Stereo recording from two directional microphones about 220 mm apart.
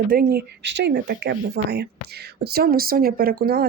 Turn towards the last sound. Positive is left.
turn(degrees=-45)  # may be behind; listen again after turning